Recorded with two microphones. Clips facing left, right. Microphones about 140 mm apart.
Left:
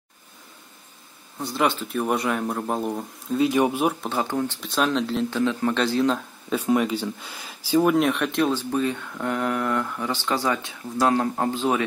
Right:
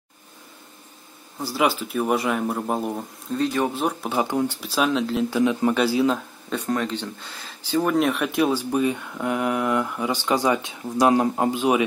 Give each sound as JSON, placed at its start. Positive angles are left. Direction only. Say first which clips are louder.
{"t": 1.4, "sound": "speech", "louder": "right 1 dB", "side_deg": -5}
{"t": 4.0, "sound": "speech", "louder": "right 2 dB", "side_deg": -10}